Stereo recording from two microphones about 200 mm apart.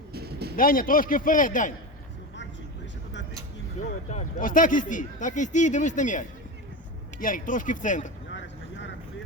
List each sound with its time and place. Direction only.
0.1 s a sound: 50° right (ahead or behind)
0.5 s a man's voice: 45° left (ahead or behind)
4.1 s speech: 40° left (ahead or behind)
8.3 s vehicle: 65° left (ahead or behind)